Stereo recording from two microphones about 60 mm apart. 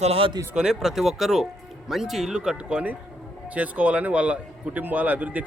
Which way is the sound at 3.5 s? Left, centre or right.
Right.